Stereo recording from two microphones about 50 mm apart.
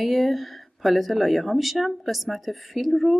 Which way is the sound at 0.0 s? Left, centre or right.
Centre.